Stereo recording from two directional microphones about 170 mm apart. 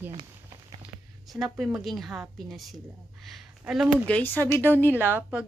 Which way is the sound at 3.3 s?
Centre (ahead or behind).